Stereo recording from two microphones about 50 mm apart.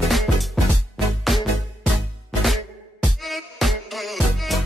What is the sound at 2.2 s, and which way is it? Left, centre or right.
Music, centre.